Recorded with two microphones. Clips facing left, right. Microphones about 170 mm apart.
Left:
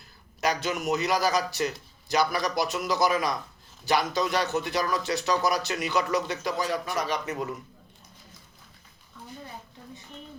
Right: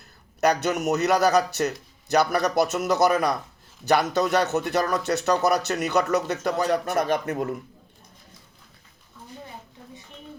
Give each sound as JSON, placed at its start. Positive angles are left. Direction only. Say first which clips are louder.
{"t": 0.4, "sound": "speech", "louder": "right 5 dB", "side_deg": -60}